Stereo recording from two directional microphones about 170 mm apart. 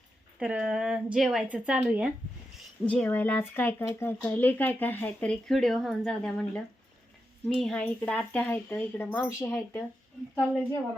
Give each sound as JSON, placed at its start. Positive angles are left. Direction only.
{"t": 0.3, "sound": "a woman's voice", "side_deg": -5}
{"t": 2.8, "sound": "speech", "side_deg": 5}